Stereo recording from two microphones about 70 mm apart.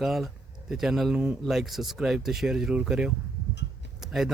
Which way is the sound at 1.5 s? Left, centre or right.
Centre.